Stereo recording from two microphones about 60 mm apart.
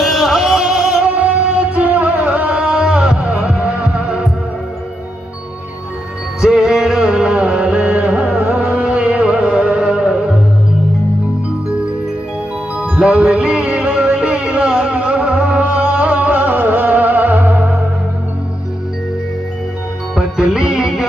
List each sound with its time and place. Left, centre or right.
0.0 s music: centre
1.0 s music: right
6.4 s music: centre
12.7 s music: right
20.2 s music: centre